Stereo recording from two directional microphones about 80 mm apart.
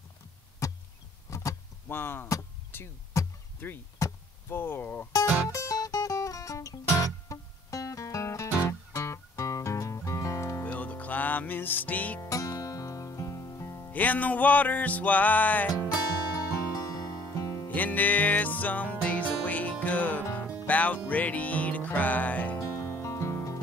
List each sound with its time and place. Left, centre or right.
0.6 s a sound: left
1.9 s music: left
4.0 s a sound: left
4.5 s music: left
5.5 s music: left
10.6 s music: left
12.2 s music: left
13.9 s music: left
16.3 s music: left
17.6 s music: left
22.6 s music: left